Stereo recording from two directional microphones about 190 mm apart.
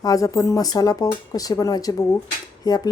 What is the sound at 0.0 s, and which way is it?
Speech, 20° left (ahead or behind).